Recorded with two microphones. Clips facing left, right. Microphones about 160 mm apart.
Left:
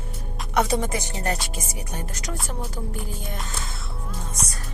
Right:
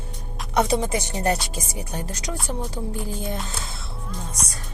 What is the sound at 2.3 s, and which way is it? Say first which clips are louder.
Speech: right 3 dB; centre (ahead or behind).